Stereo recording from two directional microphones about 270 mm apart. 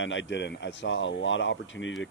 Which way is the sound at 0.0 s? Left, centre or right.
Left.